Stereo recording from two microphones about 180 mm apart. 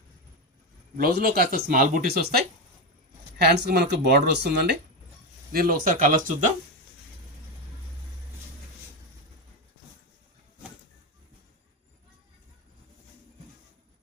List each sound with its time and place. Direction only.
0.9 s speech: 55° right (ahead or behind)
5.5 s speech: 55° right (ahead or behind)